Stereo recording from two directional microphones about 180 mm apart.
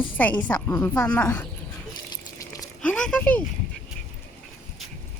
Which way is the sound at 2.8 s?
5° left (ahead or behind).